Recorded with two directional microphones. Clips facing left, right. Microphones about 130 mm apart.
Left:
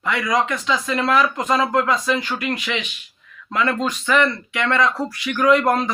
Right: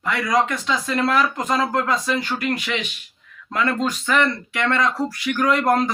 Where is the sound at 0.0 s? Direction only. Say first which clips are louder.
Even; 40° right (ahead or behind).